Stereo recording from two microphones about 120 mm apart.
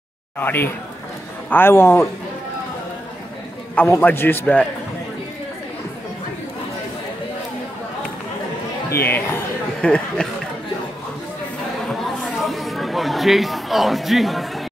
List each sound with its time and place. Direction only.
0.4 s a man's voice: 15° left (ahead or behind)
3.7 s a man's voice: 15° left (ahead or behind)
8.9 s speech: 20° left (ahead or behind)
9.8 s a man's voice: 10° left (ahead or behind)
11.9 s chatter: centre (ahead or behind)